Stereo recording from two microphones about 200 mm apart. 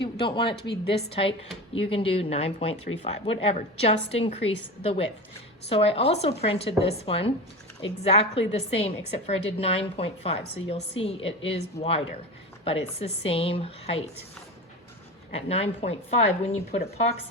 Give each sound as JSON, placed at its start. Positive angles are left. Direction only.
{"t": 0.0, "sound": "a woman's voice", "side_deg": 25}
{"t": 15.3, "sound": "a woman's voice", "side_deg": 30}